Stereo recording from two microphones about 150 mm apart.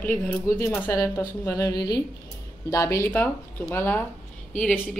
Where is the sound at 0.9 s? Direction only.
20° left (ahead or behind).